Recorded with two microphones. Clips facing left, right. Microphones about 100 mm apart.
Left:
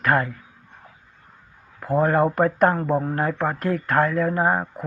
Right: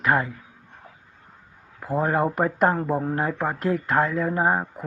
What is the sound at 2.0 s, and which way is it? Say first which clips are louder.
Speech: left 3 dB; 15° right (ahead or behind).